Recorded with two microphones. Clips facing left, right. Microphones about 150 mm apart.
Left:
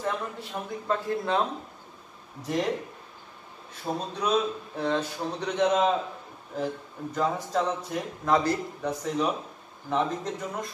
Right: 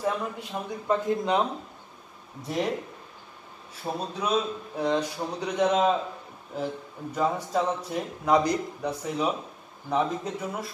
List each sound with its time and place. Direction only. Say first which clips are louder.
0.0 s speech: right 2 dB; 15° right (ahead or behind)
2.4 s speech: left 1 dB; 5° right (ahead or behind)
3.9 s speech: left 1 dB; 10° right (ahead or behind)